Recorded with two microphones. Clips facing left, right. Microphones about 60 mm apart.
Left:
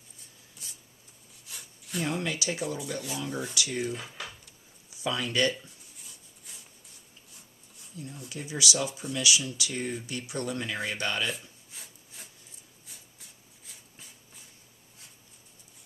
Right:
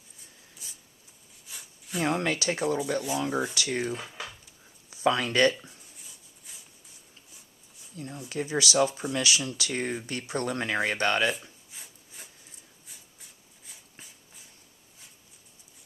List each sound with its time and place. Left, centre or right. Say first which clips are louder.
0.6 s a sound: left 2 dB; centre
2.0 s speech: right 4 dB; right
3.5 s speech: right 2 dB; right
4.9 s speech: right 6 dB; right
6.0 s rub: even; centre
7.9 s speech: right 6 dB; right
9.0 s speech: right 1 dB; right
11.7 s wood: even; centre